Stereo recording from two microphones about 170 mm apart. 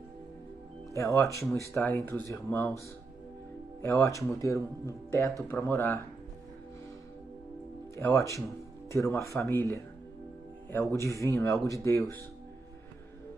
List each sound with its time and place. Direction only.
0.9 s speech: 20° left (ahead or behind)
3.8 s speech: 15° left (ahead or behind)
7.9 s speech: 20° left (ahead or behind)